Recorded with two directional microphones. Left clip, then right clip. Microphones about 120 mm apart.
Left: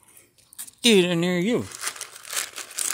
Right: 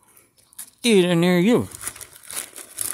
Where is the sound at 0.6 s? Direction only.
10° right (ahead or behind).